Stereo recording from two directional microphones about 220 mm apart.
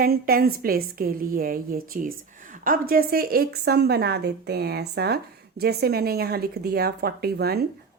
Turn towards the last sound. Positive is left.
turn(degrees=-45)  # may be behind; listen again after turning